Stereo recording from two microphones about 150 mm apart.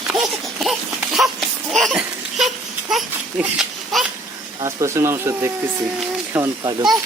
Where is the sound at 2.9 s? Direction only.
Centre (ahead or behind).